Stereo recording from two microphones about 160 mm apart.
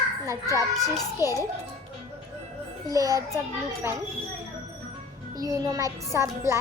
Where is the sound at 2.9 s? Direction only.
20° right (ahead or behind).